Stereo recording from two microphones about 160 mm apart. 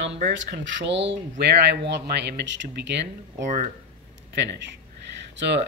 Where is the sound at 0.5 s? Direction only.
90° right.